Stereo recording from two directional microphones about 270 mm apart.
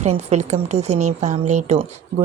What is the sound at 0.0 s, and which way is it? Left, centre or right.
A woman's voice, right.